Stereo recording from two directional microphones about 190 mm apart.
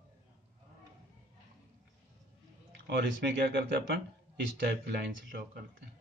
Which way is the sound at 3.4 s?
60° right (ahead or behind).